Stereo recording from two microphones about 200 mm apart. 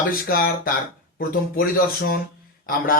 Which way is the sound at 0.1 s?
45° left (ahead or behind).